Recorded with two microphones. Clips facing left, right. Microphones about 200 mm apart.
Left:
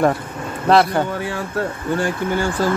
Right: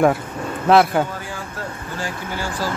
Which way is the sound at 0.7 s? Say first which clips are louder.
Even; centre (ahead or behind).